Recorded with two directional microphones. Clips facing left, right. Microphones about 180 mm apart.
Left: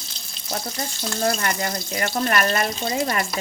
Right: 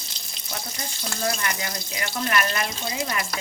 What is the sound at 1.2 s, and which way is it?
Speech, 40° left (ahead or behind).